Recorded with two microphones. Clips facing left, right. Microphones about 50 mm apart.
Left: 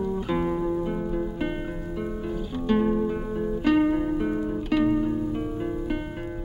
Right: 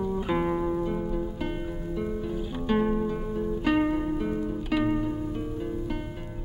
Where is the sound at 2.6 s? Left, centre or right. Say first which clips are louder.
Left 3 dB; centre.